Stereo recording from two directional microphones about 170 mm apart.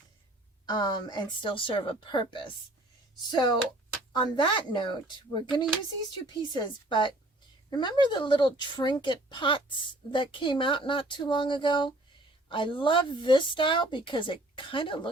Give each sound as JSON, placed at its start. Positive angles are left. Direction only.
{"t": 0.6, "sound": "a woman's voice", "side_deg": 25}
{"t": 4.1, "sound": "a woman's voice", "side_deg": 25}